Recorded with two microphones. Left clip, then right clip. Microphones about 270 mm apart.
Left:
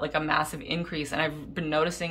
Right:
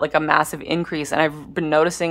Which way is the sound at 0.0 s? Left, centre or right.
Centre.